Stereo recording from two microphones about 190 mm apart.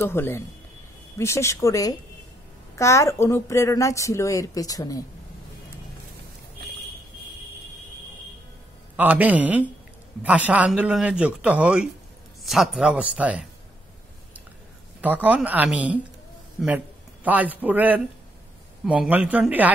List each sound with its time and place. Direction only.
0.0 s a woman's voice: 10° left (ahead or behind)
8.9 s speech: 10° right (ahead or behind)
15.0 s a man's voice: 10° right (ahead or behind)